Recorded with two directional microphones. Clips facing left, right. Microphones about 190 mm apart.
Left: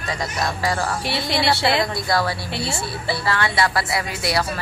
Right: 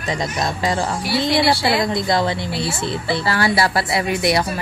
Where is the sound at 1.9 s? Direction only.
20° right (ahead or behind).